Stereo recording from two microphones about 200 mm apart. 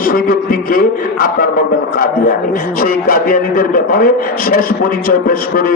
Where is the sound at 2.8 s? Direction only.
45° left (ahead or behind).